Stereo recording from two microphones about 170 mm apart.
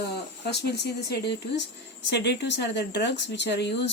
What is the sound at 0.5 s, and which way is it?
Speech, 75° left (ahead or behind).